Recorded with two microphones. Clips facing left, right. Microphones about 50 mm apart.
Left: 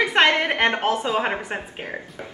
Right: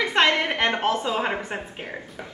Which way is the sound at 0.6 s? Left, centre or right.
Left.